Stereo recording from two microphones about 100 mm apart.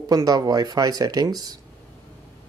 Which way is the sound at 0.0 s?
40° right (ahead or behind).